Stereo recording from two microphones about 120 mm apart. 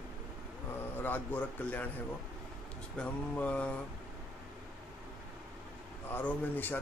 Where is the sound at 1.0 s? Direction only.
15° left (ahead or behind).